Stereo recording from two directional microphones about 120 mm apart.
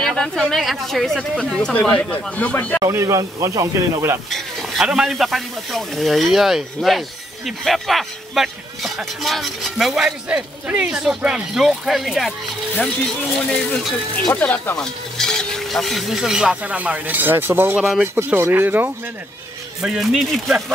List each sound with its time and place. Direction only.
0.0 s a man's voice: 5° left (ahead or behind)
2.8 s speech: 25° right (ahead or behind)
4.3 s a man's voice: centre (ahead or behind)
14.2 s a man's voice: 15° left (ahead or behind); by 17.7 s 20° right (ahead or behind)
17.7 s a man's voice: 5° right (ahead or behind)
18.0 s speech: 20° right (ahead or behind)
19.8 s a man's voice: centre (ahead or behind)